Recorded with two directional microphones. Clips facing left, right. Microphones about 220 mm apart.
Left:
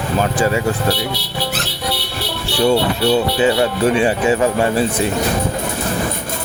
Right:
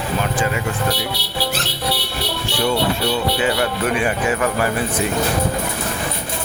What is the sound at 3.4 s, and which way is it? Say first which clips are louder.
Speech: left 5 dB; 25° left (ahead or behind).